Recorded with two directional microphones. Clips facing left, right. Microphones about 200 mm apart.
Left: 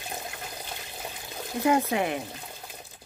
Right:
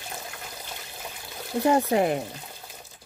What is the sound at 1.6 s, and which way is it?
Speech, 35° right (ahead or behind).